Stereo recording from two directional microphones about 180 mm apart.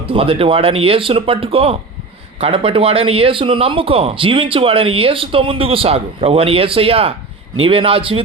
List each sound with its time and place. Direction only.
0.0 s a man's voice: 30° right (ahead or behind)